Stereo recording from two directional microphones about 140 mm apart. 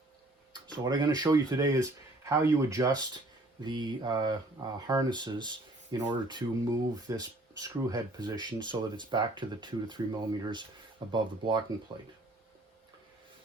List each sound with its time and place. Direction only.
0.5 s speech: 30° right (ahead or behind)